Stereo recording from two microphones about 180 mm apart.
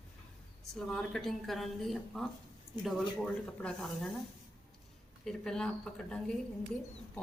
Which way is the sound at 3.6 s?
5° left (ahead or behind).